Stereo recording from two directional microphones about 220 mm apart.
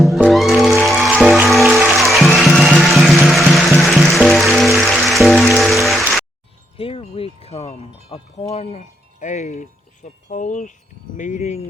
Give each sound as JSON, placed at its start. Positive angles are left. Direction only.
{"t": 0.0, "sound": "music", "side_deg": 0}
{"t": 6.7, "sound": "wind chime", "side_deg": 25}
{"t": 11.2, "sound": "speech", "side_deg": 35}